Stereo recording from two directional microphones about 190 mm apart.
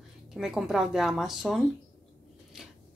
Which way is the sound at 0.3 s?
Centre (ahead or behind).